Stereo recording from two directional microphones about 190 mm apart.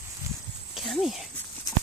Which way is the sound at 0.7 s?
Centre (ahead or behind).